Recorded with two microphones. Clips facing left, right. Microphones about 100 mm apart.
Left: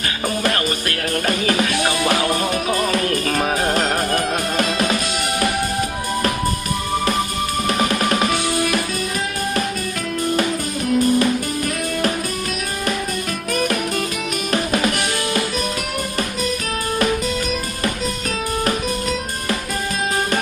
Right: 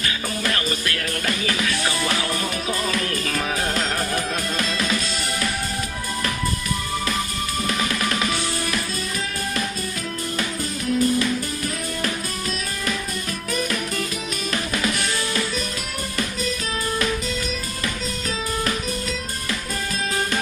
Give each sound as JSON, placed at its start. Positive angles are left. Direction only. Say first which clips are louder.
{"t": 0.4, "sound": "music", "louder": "left 2 dB", "side_deg": 50}
{"t": 7.7, "sound": "music", "louder": "left 6 dB", "side_deg": 55}
{"t": 10.9, "sound": "music", "louder": "left 4 dB", "side_deg": 55}
{"t": 13.5, "sound": "music", "louder": "left 5 dB", "side_deg": 60}